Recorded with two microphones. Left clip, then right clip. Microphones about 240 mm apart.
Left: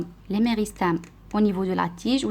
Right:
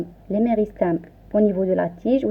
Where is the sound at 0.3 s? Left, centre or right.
Left.